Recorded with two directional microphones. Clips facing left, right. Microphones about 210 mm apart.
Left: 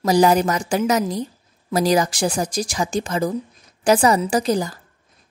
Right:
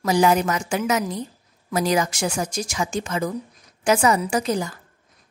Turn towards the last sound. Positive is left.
turn(degrees=35)  # may be behind; listen again after turning